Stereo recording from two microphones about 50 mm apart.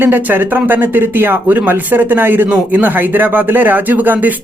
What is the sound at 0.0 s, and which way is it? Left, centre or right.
Speech, right.